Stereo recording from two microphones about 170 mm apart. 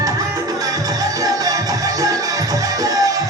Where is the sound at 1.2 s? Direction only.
20° right (ahead or behind).